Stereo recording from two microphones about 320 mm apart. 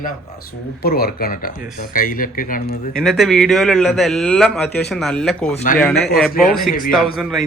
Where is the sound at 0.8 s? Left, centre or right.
Left.